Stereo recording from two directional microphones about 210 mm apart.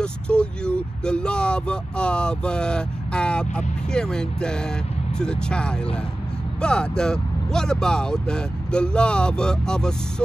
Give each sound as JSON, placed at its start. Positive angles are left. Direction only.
{"t": 0.0, "sound": "speech", "side_deg": 5}